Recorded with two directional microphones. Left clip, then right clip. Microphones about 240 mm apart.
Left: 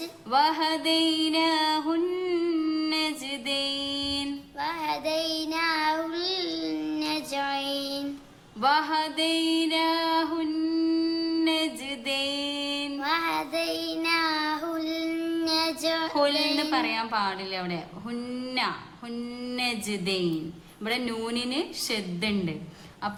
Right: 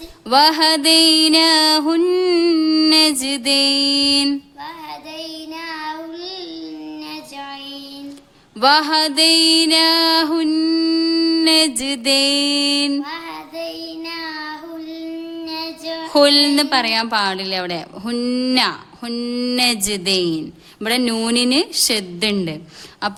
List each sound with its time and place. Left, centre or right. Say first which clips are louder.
0.3 s a woman's voice: right 10 dB; right
4.9 s child singing: left 3 dB; left
8.6 s music: right 10 dB; right
13.0 s child singing: left 1 dB; left
16.1 s a woman's voice: right 15 dB; right